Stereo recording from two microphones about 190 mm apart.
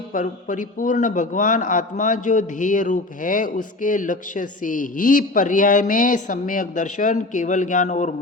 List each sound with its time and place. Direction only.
0.1 s a man's voice: 45° left (ahead or behind)